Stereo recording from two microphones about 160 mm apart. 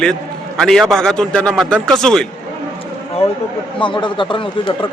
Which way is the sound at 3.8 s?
30° left (ahead or behind).